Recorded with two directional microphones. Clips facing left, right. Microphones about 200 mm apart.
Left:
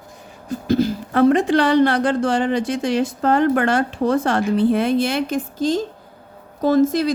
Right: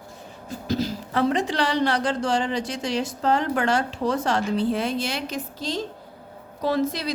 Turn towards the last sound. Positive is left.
turn(degrees=45)  # may be behind; listen again after turning